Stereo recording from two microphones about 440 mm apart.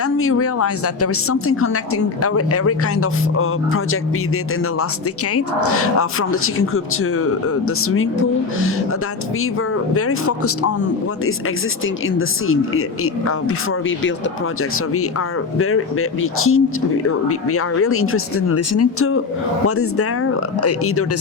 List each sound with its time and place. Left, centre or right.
0.0 s a woman's voice: left
5.3 s a woman's voice: left
9.9 s speech: left
12.0 s a woman's voice: left
15.5 s a woman's voice: left